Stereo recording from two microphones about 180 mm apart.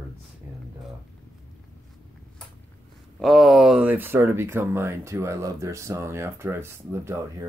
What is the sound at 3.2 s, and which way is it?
Speech, centre (ahead or behind).